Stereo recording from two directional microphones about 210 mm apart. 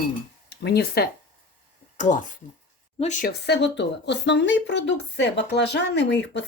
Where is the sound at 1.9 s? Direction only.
35° left (ahead or behind).